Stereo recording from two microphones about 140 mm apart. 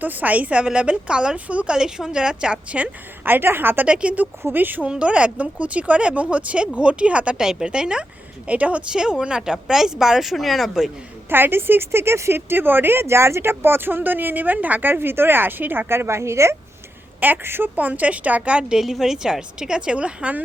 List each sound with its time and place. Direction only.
0.0 s a woman's voice: 10° right (ahead or behind)
11.3 s a woman's voice: 15° right (ahead or behind)